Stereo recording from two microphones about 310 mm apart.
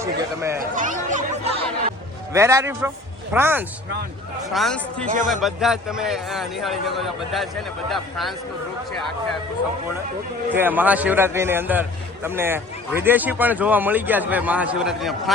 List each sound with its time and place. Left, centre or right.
0.0 s speech: centre
0.6 s speech: right
2.3 s a man's voice: centre
5.0 s speech: right
5.3 s a man's voice: centre
10.5 s a man's voice: centre